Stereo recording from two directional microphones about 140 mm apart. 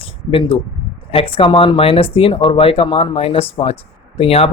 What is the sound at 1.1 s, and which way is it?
A man's voice, 40° left (ahead or behind).